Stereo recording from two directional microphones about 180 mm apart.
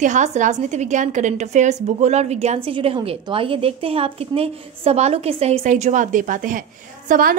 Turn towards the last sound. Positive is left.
turn(degrees=-50)  # may be behind; listen again after turning